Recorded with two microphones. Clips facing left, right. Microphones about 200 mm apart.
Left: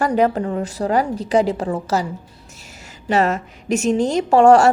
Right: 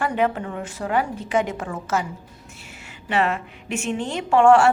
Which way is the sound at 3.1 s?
40° left (ahead or behind).